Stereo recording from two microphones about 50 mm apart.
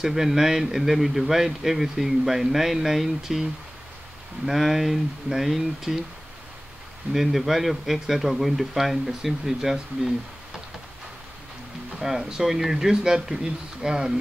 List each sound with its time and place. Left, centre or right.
0.0 s speech: centre
4.5 s speech: centre
7.1 s speech: centre
12.0 s speech: centre